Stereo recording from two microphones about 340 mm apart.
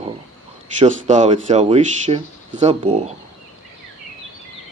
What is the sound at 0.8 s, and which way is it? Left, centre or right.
Speech, right.